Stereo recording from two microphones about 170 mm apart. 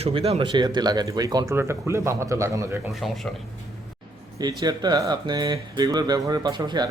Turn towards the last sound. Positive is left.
turn(degrees=-25)  # may be behind; listen again after turning